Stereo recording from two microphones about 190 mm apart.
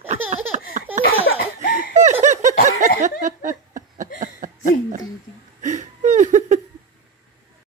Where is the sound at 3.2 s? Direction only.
40° right (ahead or behind).